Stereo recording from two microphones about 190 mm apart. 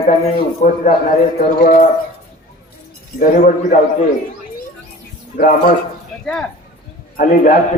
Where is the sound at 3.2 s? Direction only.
45° left (ahead or behind).